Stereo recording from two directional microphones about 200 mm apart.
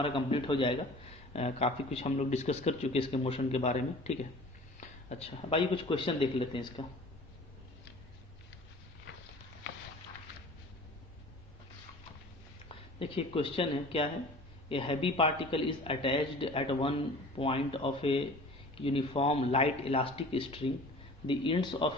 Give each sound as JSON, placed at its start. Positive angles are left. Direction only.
{"t": 0.0, "sound": "a man's voice", "side_deg": 25}
{"t": 12.6, "sound": "a man's voice", "side_deg": 25}